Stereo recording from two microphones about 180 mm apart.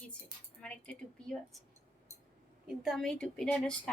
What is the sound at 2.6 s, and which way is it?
A woman's voice, centre (ahead or behind).